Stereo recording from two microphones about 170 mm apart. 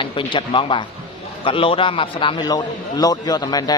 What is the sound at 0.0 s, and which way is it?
Speech, 30° left (ahead or behind).